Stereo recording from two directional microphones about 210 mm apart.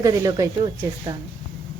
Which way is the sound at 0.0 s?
15° right (ahead or behind).